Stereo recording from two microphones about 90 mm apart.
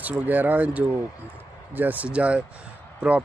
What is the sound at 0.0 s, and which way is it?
Speech, 20° right (ahead or behind).